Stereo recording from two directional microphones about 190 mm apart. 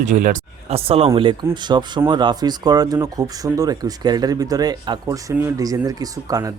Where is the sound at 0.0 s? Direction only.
40° right (ahead or behind).